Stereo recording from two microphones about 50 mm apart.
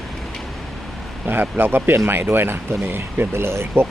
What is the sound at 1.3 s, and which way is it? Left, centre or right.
Speech, right.